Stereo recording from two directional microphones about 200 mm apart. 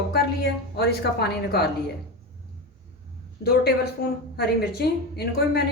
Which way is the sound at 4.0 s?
45° left (ahead or behind).